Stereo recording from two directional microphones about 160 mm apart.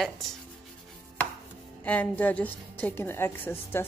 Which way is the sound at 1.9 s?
10° left (ahead or behind).